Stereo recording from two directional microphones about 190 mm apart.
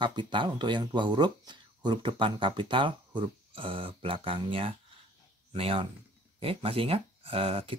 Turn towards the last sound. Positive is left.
turn(degrees=-30)  # may be behind; listen again after turning